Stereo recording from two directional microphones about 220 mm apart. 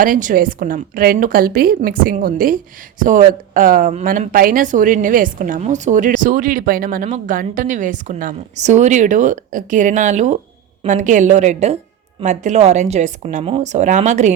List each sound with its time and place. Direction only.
0.0 s a woman's voice: 35° right (ahead or behind)